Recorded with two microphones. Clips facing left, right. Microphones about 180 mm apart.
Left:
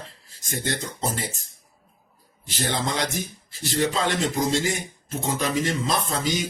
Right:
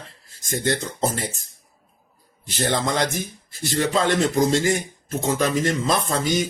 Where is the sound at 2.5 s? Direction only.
50° right (ahead or behind).